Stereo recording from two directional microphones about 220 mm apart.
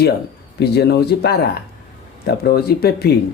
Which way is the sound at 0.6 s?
50° left (ahead or behind).